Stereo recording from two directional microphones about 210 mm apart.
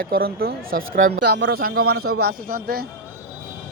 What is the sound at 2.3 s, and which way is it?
Speech, 45° right (ahead or behind).